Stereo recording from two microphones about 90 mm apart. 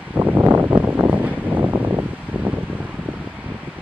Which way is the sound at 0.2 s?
20° right (ahead or behind).